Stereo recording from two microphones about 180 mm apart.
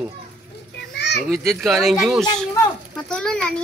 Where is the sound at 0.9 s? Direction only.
75° left (ahead or behind).